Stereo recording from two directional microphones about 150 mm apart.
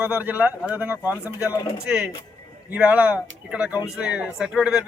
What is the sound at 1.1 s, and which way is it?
Speech, 20° left (ahead or behind).